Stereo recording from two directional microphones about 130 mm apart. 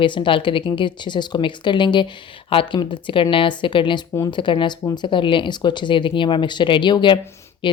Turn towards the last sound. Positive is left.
turn(degrees=40)  # may be behind; listen again after turning